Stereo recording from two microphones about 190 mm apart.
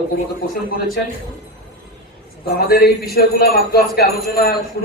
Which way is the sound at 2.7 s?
55° left (ahead or behind).